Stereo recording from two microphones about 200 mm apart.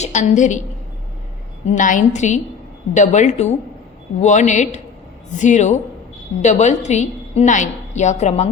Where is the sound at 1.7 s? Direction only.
40° left (ahead or behind).